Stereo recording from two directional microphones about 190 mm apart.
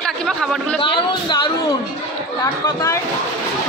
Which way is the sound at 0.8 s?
25° left (ahead or behind).